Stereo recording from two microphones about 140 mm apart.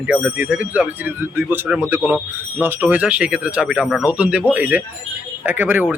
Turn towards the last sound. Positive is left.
turn(degrees=-15)  # may be behind; listen again after turning